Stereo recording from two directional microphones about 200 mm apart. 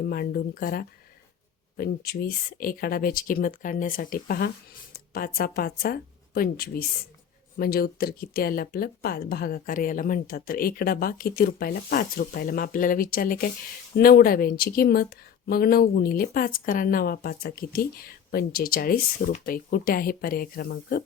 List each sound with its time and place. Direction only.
0.0 s speech: 50° left (ahead or behind)